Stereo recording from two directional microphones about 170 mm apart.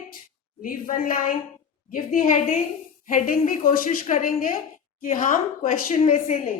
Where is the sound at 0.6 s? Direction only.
55° left (ahead or behind).